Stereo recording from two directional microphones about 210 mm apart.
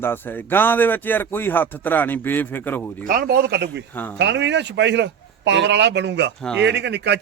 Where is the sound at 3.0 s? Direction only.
45° right (ahead or behind).